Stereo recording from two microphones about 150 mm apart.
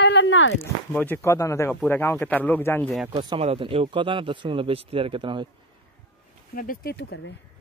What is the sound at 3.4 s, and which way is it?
A man's voice, 40° right (ahead or behind).